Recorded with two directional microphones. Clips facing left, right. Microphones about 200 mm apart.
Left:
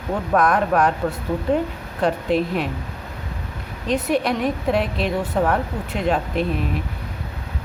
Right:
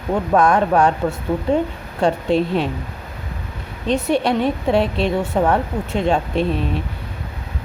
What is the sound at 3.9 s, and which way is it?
Speech, 25° right (ahead or behind).